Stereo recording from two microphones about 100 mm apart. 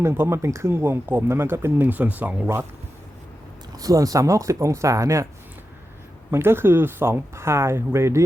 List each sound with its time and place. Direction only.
0.0 s speech: 25° right (ahead or behind)
3.8 s speech: 35° right (ahead or behind)
6.3 s speech: 25° right (ahead or behind)